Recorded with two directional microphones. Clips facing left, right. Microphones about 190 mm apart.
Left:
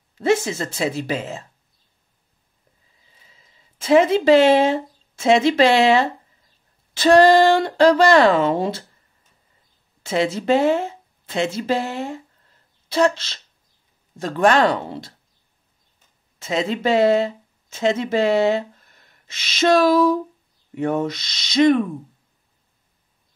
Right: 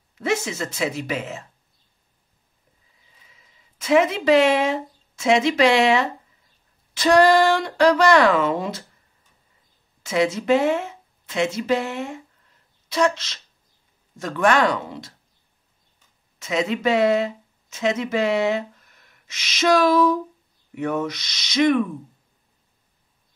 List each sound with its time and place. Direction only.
0.2 s speech: 30° left (ahead or behind)
3.3 s speech: 30° left (ahead or behind)
10.0 s speech: 30° left (ahead or behind)
16.3 s speech: 30° left (ahead or behind)